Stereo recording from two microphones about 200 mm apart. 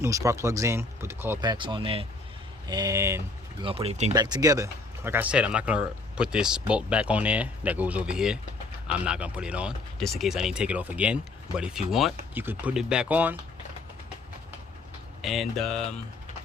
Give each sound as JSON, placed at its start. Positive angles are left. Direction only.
{"t": 0.0, "sound": "speech", "side_deg": -15}
{"t": 3.6, "sound": "speech", "side_deg": -25}
{"t": 4.1, "sound": "speech", "side_deg": -20}
{"t": 15.2, "sound": "speech", "side_deg": 0}